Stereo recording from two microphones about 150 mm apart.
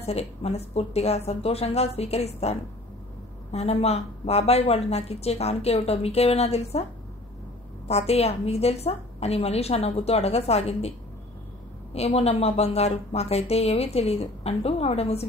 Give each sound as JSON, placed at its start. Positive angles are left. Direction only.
{"t": 0.0, "sound": "a woman's voice", "side_deg": 45}
{"t": 3.5, "sound": "a woman's voice", "side_deg": 45}
{"t": 7.9, "sound": "a woman's voice", "side_deg": 45}
{"t": 11.9, "sound": "a woman's voice", "side_deg": 45}